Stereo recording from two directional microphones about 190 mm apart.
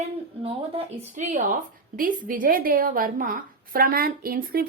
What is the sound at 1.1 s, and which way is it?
A woman's voice, 40° right (ahead or behind).